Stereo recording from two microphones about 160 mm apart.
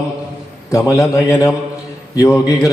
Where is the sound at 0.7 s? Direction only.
20° left (ahead or behind).